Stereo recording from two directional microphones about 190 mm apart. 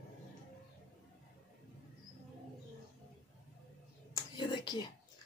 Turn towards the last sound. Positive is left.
turn(degrees=25)  # may be behind; listen again after turning